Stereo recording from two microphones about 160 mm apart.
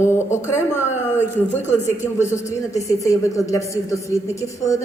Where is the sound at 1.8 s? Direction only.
15° left (ahead or behind).